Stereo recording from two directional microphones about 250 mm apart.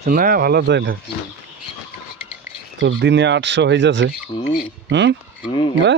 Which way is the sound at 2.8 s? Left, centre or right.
Right.